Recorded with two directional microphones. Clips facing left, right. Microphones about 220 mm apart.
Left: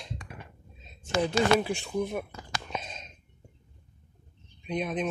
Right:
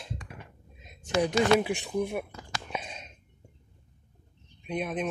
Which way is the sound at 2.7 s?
10° right (ahead or behind).